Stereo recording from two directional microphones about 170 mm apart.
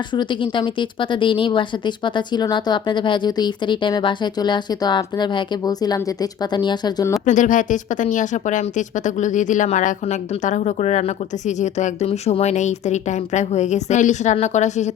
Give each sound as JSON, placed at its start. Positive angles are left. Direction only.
{"t": 0.1, "sound": "speech", "side_deg": 25}
{"t": 7.3, "sound": "speech", "side_deg": 50}